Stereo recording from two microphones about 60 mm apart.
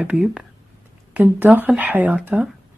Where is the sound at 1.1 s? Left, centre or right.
Right.